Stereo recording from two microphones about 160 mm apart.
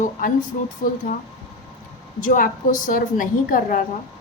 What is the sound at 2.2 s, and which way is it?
A woman's voice, 60° left (ahead or behind).